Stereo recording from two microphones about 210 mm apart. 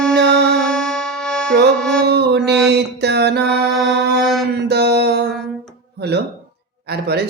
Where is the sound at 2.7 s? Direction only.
50° right (ahead or behind).